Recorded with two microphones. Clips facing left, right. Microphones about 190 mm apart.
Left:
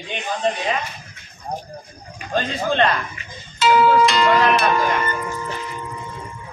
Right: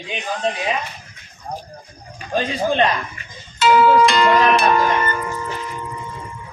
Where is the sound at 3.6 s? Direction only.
50° right (ahead or behind).